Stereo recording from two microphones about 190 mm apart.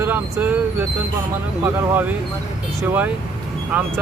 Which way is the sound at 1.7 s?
10° right (ahead or behind).